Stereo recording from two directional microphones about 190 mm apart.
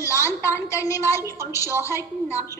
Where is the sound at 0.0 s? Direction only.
15° left (ahead or behind).